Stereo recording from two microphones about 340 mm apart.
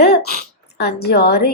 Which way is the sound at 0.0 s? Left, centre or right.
Left.